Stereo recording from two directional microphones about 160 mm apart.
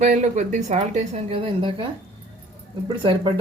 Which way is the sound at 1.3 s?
30° right (ahead or behind).